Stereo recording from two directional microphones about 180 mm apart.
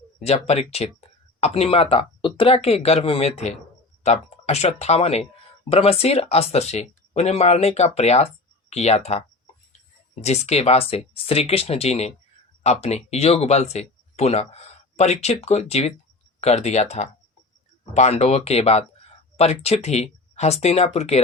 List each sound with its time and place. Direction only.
0.2 s speech: 35° left (ahead or behind)